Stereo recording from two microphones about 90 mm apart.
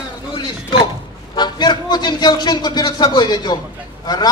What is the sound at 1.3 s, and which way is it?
A man's voice, 55° left (ahead or behind).